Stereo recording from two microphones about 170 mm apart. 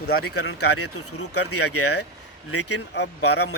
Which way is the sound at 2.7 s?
90° left.